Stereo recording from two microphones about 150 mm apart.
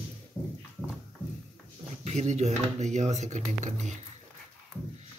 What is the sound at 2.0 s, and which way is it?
Speech, 50° right (ahead or behind).